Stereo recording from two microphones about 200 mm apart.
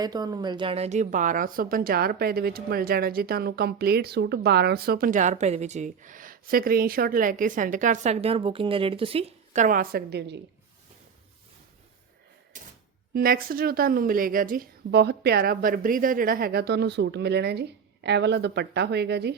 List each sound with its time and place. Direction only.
0.0 s a woman's voice: 20° right (ahead or behind); by 10.4 s 60° right (ahead or behind)
12.5 s a sound: 40° right (ahead or behind)
13.1 s a woman's voice: 45° right (ahead or behind)